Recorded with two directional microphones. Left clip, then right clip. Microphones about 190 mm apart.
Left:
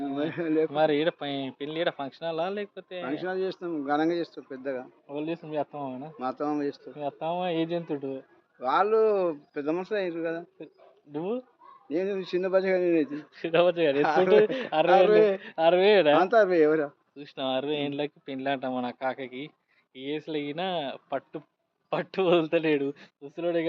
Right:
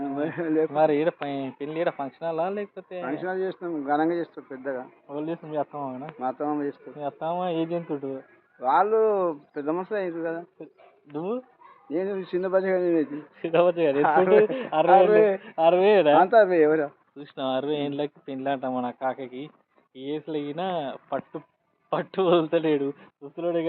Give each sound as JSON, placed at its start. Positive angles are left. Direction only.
{"t": 0.0, "sound": "speech", "side_deg": 25}
{"t": 0.7, "sound": "speech", "side_deg": 5}
{"t": 3.1, "sound": "speech", "side_deg": 30}
{"t": 5.0, "sound": "speech", "side_deg": 5}
{"t": 6.1, "sound": "speech", "side_deg": 25}
{"t": 7.0, "sound": "speech", "side_deg": 5}
{"t": 8.6, "sound": "speech", "side_deg": 25}
{"t": 11.1, "sound": "speech", "side_deg": 5}
{"t": 11.9, "sound": "speech", "side_deg": 20}
{"t": 13.1, "sound": "speech", "side_deg": 0}
{"t": 14.0, "sound": "speech", "side_deg": 25}
{"t": 14.3, "sound": "speech", "side_deg": 5}
{"t": 16.2, "sound": "speech", "side_deg": 20}
{"t": 17.2, "sound": "speech", "side_deg": -5}